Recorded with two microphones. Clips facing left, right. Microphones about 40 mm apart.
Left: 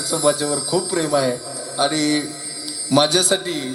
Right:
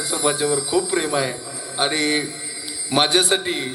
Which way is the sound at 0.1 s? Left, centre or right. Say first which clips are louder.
Left 2 dB; right.